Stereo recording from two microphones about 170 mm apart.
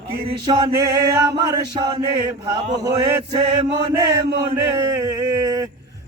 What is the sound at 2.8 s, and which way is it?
Mantra, 25° right (ahead or behind).